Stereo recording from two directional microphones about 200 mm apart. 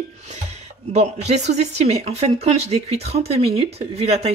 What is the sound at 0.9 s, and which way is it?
Speech, 35° right (ahead or behind).